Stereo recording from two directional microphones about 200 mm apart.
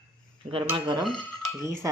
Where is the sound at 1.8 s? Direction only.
15° right (ahead or behind).